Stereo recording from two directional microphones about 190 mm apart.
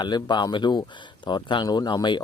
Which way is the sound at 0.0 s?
20° left (ahead or behind).